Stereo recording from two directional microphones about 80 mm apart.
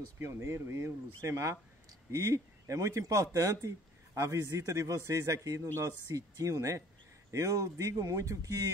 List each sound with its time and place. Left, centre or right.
0.2 s a man's voice: right